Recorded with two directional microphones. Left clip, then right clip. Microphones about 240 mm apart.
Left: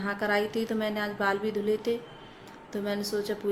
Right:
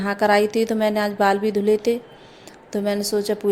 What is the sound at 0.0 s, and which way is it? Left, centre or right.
A woman's voice, right.